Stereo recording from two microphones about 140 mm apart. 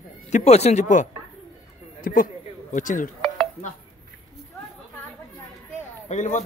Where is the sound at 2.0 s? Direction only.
80° left.